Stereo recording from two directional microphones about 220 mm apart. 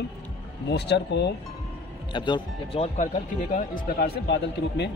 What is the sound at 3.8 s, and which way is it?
Speech, 45° left (ahead or behind).